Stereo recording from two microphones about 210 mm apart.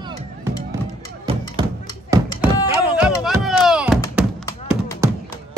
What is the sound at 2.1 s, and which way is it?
Thunk, 15° right (ahead or behind).